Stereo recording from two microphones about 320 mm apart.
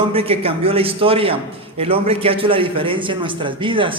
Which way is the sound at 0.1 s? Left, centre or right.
Centre.